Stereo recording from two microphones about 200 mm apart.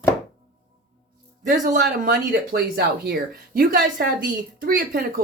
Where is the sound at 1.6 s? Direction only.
50° right (ahead or behind).